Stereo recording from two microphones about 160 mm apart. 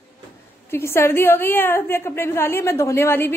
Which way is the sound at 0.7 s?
15° left (ahead or behind).